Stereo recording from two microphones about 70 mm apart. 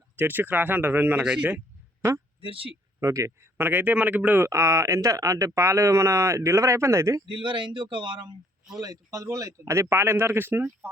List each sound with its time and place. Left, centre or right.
0.2 s speech: right
1.2 s speech: centre
2.0 s speech: right
3.0 s speech: right
3.6 s speech: right
4.4 s speech: right
8.0 s speech: right
8.8 s speech: right